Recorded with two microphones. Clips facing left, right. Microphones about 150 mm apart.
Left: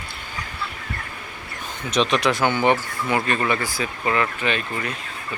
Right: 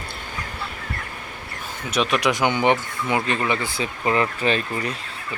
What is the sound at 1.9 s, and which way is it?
Speech, 10° right (ahead or behind).